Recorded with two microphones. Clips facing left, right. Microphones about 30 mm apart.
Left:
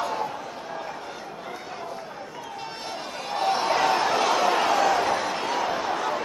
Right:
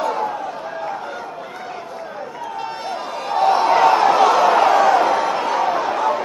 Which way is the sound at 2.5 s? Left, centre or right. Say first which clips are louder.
Right 8 dB; centre.